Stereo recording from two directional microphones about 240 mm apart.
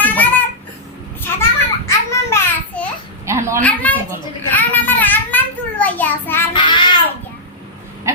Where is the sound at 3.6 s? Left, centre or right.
Centre.